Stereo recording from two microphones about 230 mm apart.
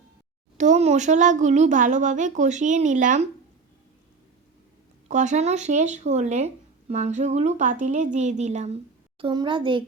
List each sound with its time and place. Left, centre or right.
0.5 s speech: right
5.0 s speech: right